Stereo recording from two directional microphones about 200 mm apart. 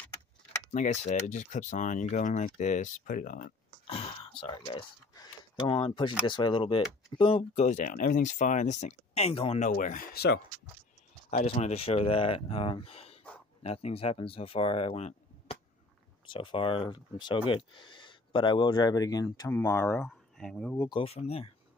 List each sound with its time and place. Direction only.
0.7 s speech: 35° left (ahead or behind)
3.8 s throat clearing: 30° left (ahead or behind)
4.4 s speech: 25° left (ahead or behind); by 10.4 s 50° left (ahead or behind)
11.2 s speech: 35° left (ahead or behind); by 20.7 s 5° left (ahead or behind)
20.7 s speech: 15° left (ahead or behind)
21.0 s speech: 30° left (ahead or behind)